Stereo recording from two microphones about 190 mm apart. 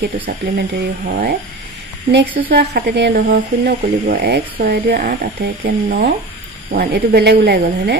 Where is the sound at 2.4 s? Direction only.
55° right (ahead or behind).